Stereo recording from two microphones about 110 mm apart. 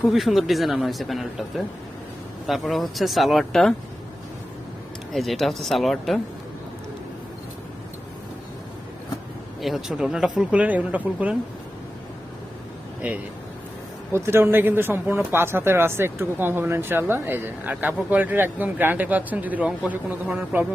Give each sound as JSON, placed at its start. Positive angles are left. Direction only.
{"t": 0.1, "sound": "speech", "side_deg": 0}
{"t": 5.1, "sound": "speech", "side_deg": 0}
{"t": 9.6, "sound": "speech", "side_deg": 0}
{"t": 13.0, "sound": "speech", "side_deg": -10}
{"t": 14.1, "sound": "speech", "side_deg": -25}